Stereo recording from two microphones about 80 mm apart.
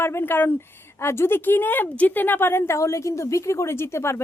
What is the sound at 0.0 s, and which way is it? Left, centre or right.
A woman's voice, left.